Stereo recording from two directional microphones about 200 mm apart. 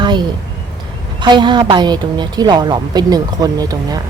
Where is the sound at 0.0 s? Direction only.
20° right (ahead or behind).